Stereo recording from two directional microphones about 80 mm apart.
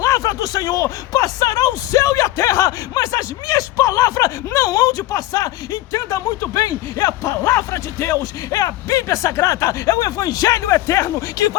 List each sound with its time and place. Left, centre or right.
0.0 s speech: left